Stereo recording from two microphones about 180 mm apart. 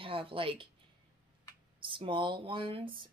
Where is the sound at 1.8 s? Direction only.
25° right (ahead or behind).